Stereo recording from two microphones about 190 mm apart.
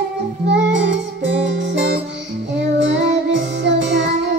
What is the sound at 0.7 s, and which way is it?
Music, 75° right (ahead or behind).